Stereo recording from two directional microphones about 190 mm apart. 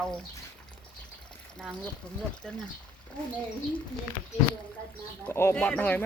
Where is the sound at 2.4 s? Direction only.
5° left (ahead or behind).